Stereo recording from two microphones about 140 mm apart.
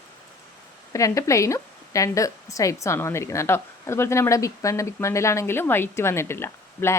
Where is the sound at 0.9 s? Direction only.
25° left (ahead or behind).